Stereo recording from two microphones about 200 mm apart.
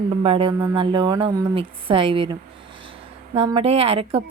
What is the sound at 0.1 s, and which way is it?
Speech, 25° right (ahead or behind).